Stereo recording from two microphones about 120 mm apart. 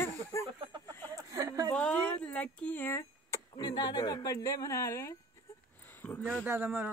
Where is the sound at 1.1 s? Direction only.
30° right (ahead or behind).